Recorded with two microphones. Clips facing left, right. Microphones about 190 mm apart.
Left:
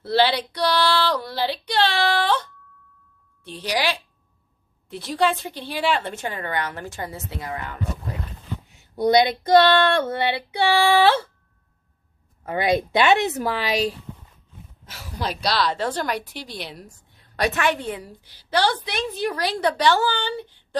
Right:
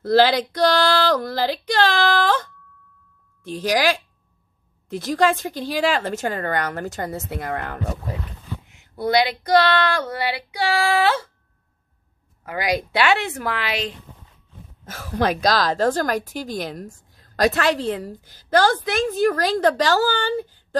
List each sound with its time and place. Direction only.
0.0 s a woman's voice: 45° right (ahead or behind)
8.9 s female singing: 20° left (ahead or behind)
12.4 s female singing: 25° left (ahead or behind)
14.9 s a woman's voice: 50° right (ahead or behind)